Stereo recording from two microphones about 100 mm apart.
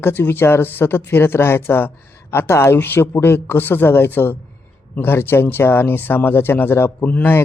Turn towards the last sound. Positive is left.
turn(degrees=20)  # may be behind; listen again after turning